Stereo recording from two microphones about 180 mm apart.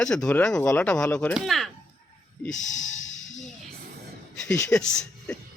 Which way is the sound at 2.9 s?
90° left.